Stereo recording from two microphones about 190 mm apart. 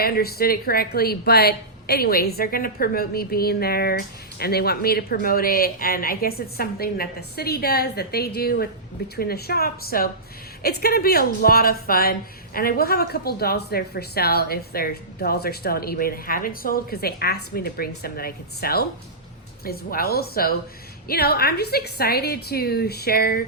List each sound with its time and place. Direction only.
0.0 s a woman's voice: 55° left (ahead or behind)